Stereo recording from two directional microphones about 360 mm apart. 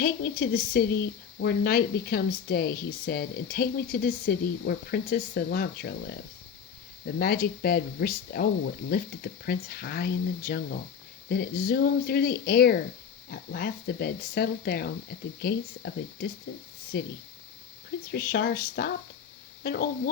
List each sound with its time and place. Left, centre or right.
0.0 s speech: left
7.2 s speech: left
18.1 s speech: left